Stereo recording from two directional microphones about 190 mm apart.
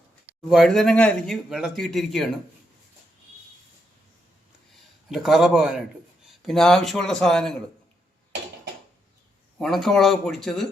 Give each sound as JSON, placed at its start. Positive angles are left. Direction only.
{"t": 0.4, "sound": "speech", "side_deg": 0}
{"t": 5.0, "sound": "speech", "side_deg": 0}
{"t": 9.6, "sound": "speech", "side_deg": 0}